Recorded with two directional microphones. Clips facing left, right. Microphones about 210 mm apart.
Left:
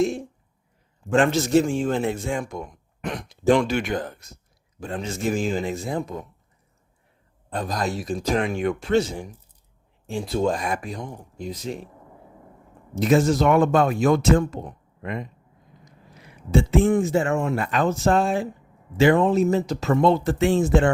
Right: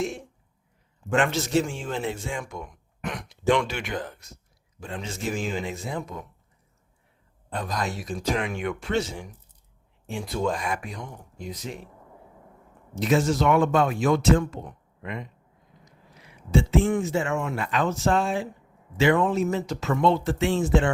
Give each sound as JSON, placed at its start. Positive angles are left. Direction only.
{"t": 1.1, "sound": "speech", "side_deg": 40}
{"t": 7.6, "sound": "speech", "side_deg": 35}
{"t": 13.0, "sound": "speech", "side_deg": 45}